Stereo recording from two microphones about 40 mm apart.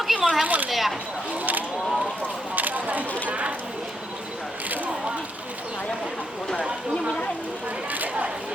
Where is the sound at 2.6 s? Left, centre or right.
Right.